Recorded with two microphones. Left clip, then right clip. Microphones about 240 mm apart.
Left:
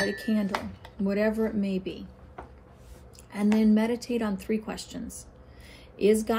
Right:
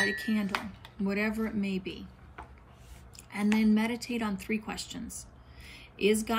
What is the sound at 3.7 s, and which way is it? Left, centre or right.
A woman's voice, centre.